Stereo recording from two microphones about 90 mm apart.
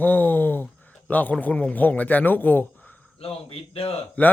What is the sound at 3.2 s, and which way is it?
Speech, 90° left.